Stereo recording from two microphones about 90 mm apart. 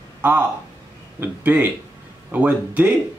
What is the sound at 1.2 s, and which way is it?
Speech, 20° right (ahead or behind).